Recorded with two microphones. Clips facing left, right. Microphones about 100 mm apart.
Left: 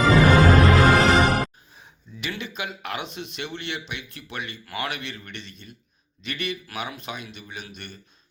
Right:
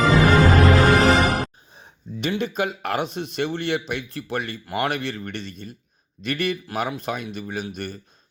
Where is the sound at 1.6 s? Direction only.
35° right (ahead or behind).